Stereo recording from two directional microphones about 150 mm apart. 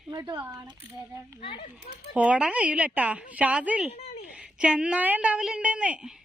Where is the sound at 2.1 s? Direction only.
10° right (ahead or behind).